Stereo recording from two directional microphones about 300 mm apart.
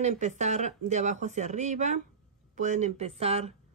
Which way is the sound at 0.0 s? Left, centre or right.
Right.